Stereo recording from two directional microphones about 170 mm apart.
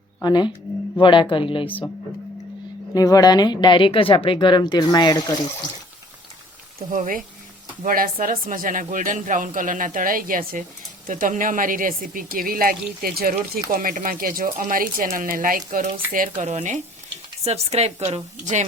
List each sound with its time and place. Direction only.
0.2 s speech: 25° left (ahead or behind)
2.9 s speech: 20° left (ahead or behind)
6.9 s a woman's voice: 50° right (ahead or behind)